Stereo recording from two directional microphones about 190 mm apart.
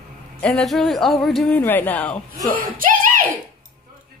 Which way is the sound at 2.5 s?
45° right (ahead or behind).